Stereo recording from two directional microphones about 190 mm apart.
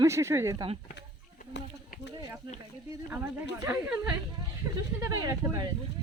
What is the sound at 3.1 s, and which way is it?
Speech, 10° right (ahead or behind).